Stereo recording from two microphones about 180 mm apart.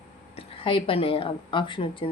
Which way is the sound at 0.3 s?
30° left (ahead or behind).